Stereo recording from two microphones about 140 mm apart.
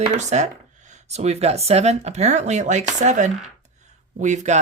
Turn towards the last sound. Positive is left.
turn(degrees=-60)  # may be behind; listen again after turning